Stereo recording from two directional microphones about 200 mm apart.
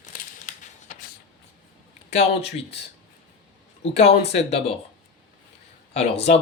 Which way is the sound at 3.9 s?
30° left (ahead or behind).